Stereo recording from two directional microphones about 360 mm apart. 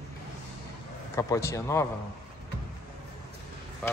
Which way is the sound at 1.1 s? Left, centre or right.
Centre.